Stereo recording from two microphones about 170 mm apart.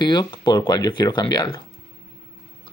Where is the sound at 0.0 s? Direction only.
25° left (ahead or behind).